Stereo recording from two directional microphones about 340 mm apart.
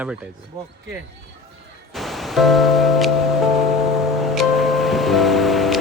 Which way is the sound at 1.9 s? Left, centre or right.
Centre.